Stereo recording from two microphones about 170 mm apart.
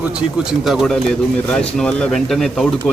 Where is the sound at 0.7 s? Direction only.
Centre (ahead or behind).